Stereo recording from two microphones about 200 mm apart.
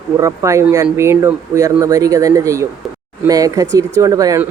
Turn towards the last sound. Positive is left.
turn(degrees=-15)  # may be behind; listen again after turning